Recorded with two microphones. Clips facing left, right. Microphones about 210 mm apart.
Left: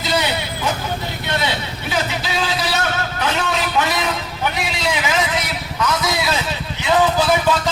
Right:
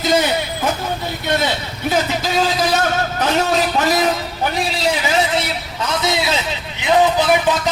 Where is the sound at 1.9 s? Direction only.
45° right (ahead or behind).